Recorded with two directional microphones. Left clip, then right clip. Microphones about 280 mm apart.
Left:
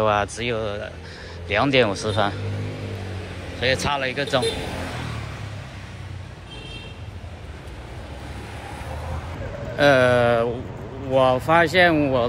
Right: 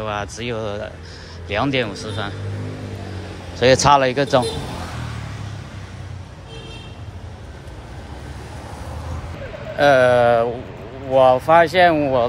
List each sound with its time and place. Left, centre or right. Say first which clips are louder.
0.0 s speech: left 5 dB; centre
3.6 s speech: right 9 dB; centre
9.8 s speech: right 3 dB; centre